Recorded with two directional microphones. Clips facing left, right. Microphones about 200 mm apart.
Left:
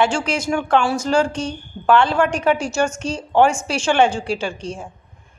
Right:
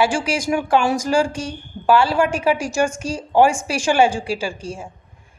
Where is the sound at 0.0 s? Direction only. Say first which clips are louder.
Even; 10° right (ahead or behind).